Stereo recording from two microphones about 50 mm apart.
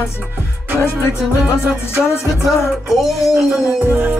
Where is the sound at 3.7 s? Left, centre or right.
Right.